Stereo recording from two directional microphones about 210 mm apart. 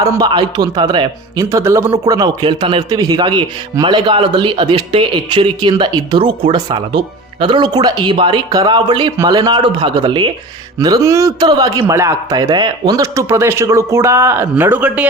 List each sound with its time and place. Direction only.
0.0 s a man's voice: 15° right (ahead or behind)